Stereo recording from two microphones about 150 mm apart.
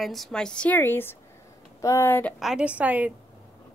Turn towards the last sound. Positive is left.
turn(degrees=-10)  # may be behind; listen again after turning